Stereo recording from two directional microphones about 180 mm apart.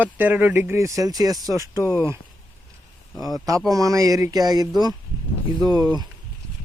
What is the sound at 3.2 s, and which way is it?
Speech, 20° right (ahead or behind).